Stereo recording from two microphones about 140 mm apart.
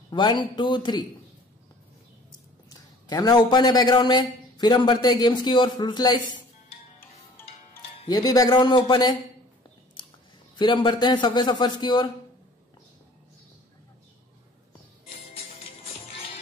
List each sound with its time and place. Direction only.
0.1 s a man's voice: 35° left (ahead or behind)
3.1 s a man's voice: 30° left (ahead or behind)
7.0 s music: 15° left (ahead or behind)
8.1 s speech: 25° left (ahead or behind)
10.0 s a sound: 35° left (ahead or behind)
10.5 s a man's voice: 35° left (ahead or behind)
15.3 s music: 45° left (ahead or behind)